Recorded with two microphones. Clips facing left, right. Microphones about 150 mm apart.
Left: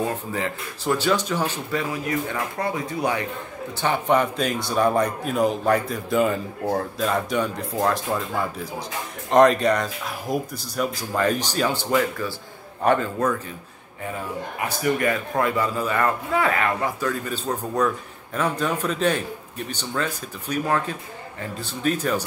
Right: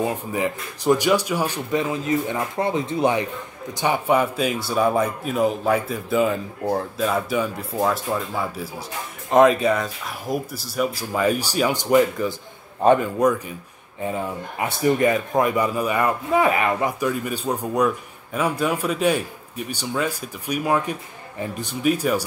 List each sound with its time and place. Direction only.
0.1 s speech: 15° right (ahead or behind)
3.8 s a man's voice: 10° right (ahead or behind)
14.8 s a man's voice: 20° right (ahead or behind)